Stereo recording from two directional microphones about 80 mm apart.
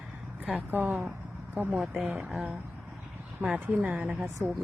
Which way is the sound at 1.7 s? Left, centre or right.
Centre.